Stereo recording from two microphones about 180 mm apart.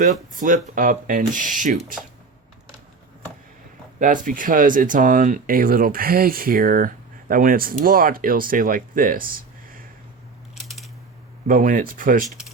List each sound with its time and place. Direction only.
0.0 s speech: 45° right (ahead or behind)
4.0 s speech: 50° right (ahead or behind)
10.5 s scissors: centre (ahead or behind)
11.4 s speech: 50° right (ahead or behind)